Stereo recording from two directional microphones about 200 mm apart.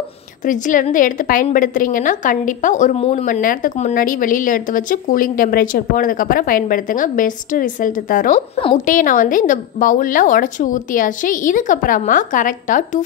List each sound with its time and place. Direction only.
0.5 s a woman's voice: 40° left (ahead or behind)
8.5 s a woman's voice: 25° left (ahead or behind)
8.8 s a woman's voice: 40° left (ahead or behind)